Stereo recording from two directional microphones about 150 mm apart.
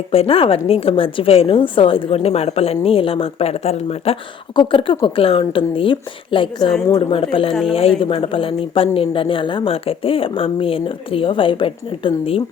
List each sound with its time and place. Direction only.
0.1 s speech: 40° left (ahead or behind)